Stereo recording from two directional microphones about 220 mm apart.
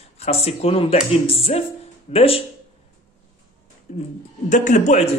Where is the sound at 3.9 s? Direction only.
30° left (ahead or behind).